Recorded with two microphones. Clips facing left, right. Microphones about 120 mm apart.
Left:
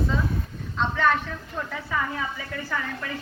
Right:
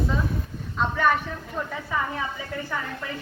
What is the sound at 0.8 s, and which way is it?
A woman's voice, 10° right (ahead or behind).